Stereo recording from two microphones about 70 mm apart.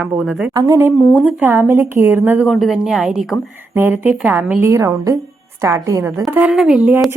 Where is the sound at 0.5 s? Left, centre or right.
Right.